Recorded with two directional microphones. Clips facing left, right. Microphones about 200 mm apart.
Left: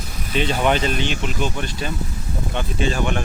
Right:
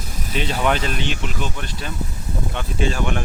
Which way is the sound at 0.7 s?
Centre (ahead or behind).